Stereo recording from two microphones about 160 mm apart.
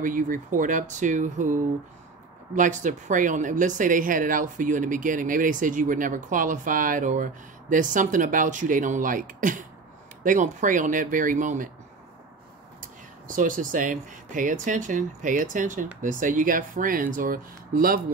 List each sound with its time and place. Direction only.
0.0 s speech: 55° right (ahead or behind)
13.3 s speech: 55° right (ahead or behind)